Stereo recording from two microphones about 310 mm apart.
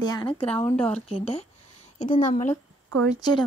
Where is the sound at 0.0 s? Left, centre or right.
Centre.